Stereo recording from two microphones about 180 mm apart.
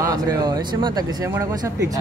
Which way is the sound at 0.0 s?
20° right (ahead or behind).